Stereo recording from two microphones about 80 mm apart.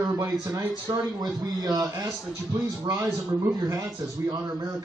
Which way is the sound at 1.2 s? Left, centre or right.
Right.